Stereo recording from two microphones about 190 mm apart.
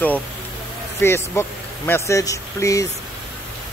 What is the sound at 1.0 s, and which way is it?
Speech, 10° left (ahead or behind).